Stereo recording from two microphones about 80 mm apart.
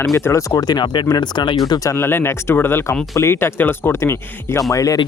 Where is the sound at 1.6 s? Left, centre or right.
Left.